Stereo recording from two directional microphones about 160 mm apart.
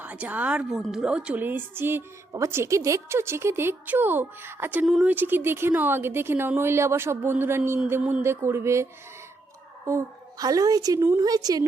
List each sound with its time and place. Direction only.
0.0 s a woman's voice: 10° right (ahead or behind)